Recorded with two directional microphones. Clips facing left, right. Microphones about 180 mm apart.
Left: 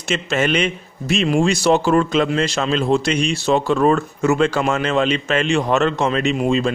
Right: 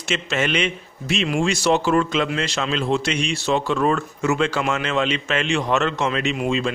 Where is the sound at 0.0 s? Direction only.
40° left (ahead or behind).